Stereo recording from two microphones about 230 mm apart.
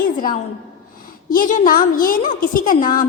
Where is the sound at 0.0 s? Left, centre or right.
Left.